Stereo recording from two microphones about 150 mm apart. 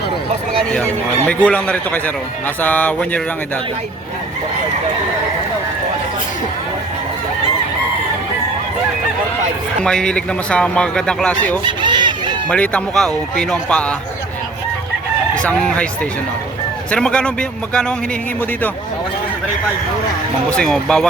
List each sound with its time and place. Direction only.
1.3 s speech: 10° left (ahead or behind)
9.8 s a man's voice: 5° left (ahead or behind)
11.6 s chicken: 30° right (ahead or behind)
12.5 s speech: 10° left (ahead or behind)
15.4 s speech: 5° left (ahead or behind)
16.9 s speech: 5° left (ahead or behind)
20.5 s a man's voice: 5° left (ahead or behind)